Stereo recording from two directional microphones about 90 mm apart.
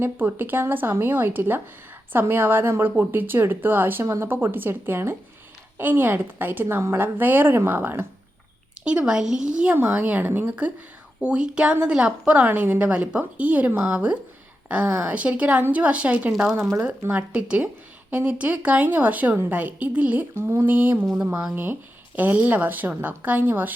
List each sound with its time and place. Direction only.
0.0 s a woman's voice: 25° right (ahead or behind)
8.8 s a woman's voice: 10° right (ahead or behind)